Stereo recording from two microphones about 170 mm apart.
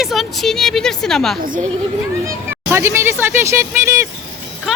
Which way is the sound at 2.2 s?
15° right (ahead or behind).